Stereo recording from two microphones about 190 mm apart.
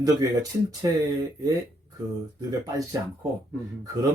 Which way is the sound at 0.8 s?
20° right (ahead or behind).